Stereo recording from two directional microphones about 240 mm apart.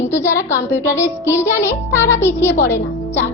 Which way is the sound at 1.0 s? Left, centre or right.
Centre.